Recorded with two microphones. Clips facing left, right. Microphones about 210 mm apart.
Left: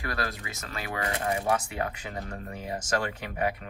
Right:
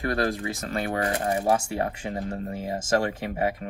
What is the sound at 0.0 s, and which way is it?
Speech, 30° right (ahead or behind).